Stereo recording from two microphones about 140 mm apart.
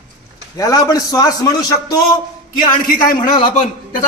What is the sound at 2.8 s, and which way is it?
Speech, 90° left.